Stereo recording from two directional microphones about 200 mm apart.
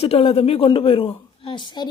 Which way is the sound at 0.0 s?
30° left (ahead or behind).